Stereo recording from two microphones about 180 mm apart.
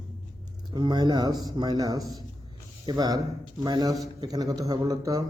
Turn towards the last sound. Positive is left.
turn(degrees=-20)  # may be behind; listen again after turning